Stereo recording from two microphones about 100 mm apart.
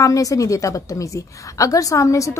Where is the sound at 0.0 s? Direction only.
35° left (ahead or behind).